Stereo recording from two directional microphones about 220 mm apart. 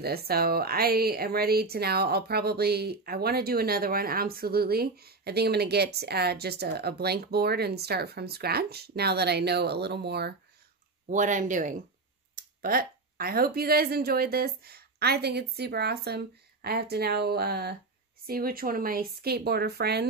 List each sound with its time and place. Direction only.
0.0 s speech: 45° right (ahead or behind)
11.1 s speech: 35° right (ahead or behind)